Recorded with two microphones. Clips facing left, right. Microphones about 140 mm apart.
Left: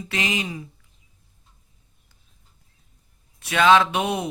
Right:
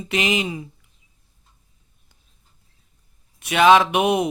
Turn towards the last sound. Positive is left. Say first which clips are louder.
# right 3 dB
turn(degrees=-15)  # may be behind; listen again after turning